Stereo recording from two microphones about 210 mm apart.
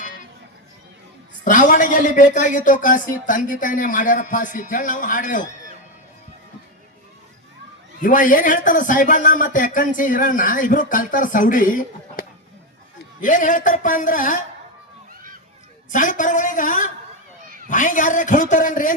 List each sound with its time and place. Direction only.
1.5 s a man's voice: 40° left (ahead or behind)
8.0 s a man's voice: 40° left (ahead or behind)
13.2 s a man's voice: 40° left (ahead or behind)
15.9 s a man's voice: 40° left (ahead or behind)